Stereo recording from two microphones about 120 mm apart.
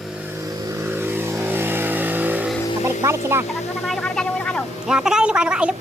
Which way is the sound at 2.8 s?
20° right (ahead or behind).